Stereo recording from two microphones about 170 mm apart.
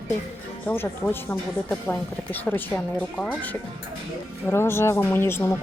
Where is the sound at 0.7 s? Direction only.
15° left (ahead or behind).